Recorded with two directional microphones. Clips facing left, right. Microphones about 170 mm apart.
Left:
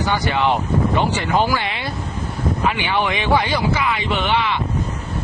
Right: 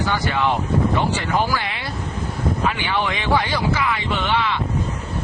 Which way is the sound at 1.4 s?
20° left (ahead or behind).